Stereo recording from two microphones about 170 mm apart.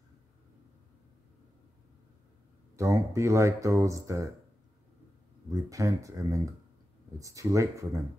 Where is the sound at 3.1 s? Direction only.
15° right (ahead or behind).